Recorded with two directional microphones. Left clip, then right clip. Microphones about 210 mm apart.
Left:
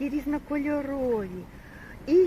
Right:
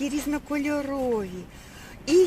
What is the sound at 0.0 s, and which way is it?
Speech, 70° right (ahead or behind).